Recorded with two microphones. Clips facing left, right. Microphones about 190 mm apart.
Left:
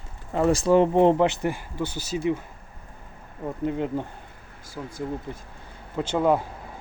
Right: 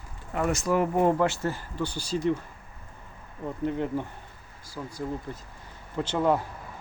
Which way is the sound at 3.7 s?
15° left (ahead or behind).